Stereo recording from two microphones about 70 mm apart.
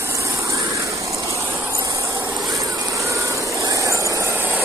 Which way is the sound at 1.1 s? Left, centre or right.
Right.